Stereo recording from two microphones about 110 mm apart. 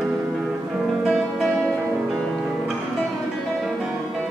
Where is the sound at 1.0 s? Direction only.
5° right (ahead or behind).